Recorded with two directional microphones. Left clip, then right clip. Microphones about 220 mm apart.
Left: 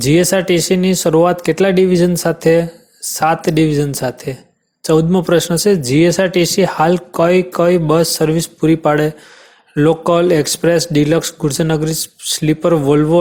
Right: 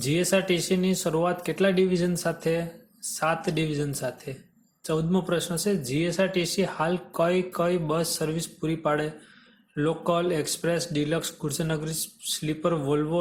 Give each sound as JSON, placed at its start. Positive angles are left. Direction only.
{"t": 0.0, "sound": "speech", "side_deg": 40}